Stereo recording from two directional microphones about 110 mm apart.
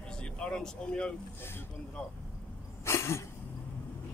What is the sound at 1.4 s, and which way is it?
Speech, 20° left (ahead or behind).